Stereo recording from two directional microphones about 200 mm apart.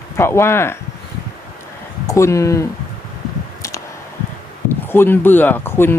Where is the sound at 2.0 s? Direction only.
15° left (ahead or behind).